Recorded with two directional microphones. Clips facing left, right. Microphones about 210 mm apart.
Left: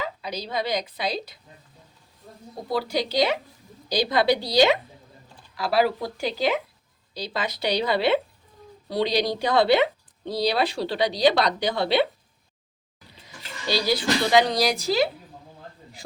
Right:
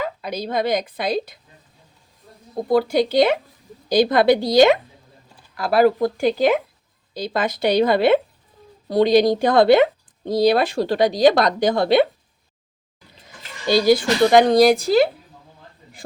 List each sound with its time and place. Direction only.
0.0 s speech: 50° right (ahead or behind)
2.6 s speech: 50° right (ahead or behind)
13.7 s speech: 50° right (ahead or behind)